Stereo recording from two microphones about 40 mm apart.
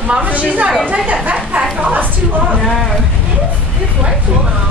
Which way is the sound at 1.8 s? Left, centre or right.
Right.